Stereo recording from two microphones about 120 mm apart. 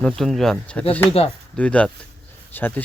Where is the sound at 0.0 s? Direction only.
Centre (ahead or behind).